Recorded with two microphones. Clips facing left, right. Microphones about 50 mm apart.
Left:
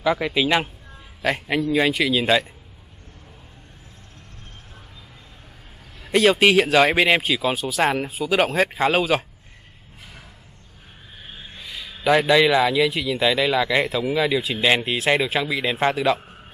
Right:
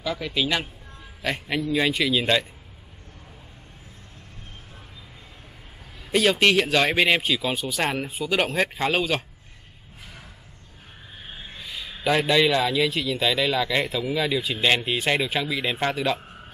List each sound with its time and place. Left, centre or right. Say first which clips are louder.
0.0 s speech: left 6 dB; centre
6.1 s speech: left 3 dB; centre
11.5 s a sound: even; centre
12.1 s speech: left 4 dB; centre